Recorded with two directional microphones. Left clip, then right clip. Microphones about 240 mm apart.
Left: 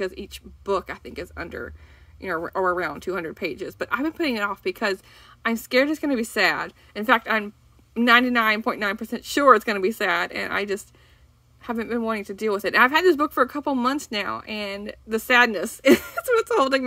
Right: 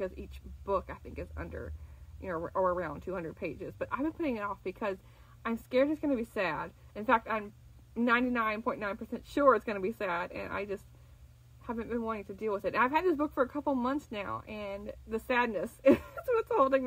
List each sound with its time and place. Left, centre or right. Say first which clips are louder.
0.7 s speech: left 8 dB; left